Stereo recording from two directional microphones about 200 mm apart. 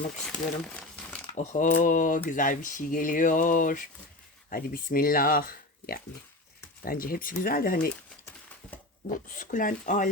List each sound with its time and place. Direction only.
0.7 s crumpling: 5° left (ahead or behind)
1.4 s speech: 40° left (ahead or behind)
9.0 s speech: 40° left (ahead or behind)